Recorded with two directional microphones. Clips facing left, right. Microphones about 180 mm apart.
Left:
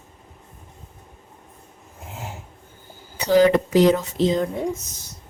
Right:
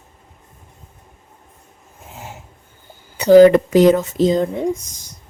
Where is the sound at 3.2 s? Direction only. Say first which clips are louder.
Right 8 dB; 50° right (ahead or behind).